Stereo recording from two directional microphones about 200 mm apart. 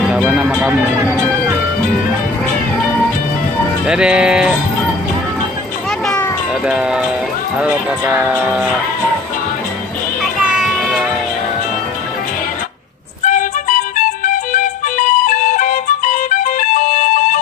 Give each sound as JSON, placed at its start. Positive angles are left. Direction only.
{"t": 0.0, "sound": "music", "side_deg": 0}
{"t": 3.8, "sound": "speech", "side_deg": -5}
{"t": 6.0, "sound": "cat", "side_deg": 10}
{"t": 6.6, "sound": "music", "side_deg": -5}
{"t": 7.5, "sound": "speech", "side_deg": -10}
{"t": 10.4, "sound": "children playing", "side_deg": 0}
{"t": 13.2, "sound": "music", "side_deg": 40}